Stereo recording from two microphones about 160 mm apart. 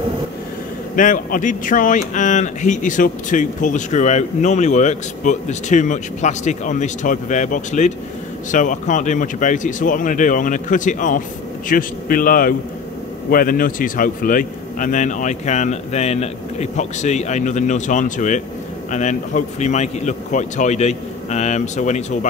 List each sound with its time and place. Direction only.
0.9 s speech: 55° left (ahead or behind)